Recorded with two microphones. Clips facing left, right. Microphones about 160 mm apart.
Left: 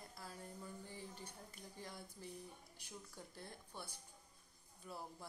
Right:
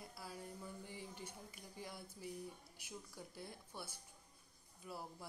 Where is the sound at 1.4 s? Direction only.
5° right (ahead or behind).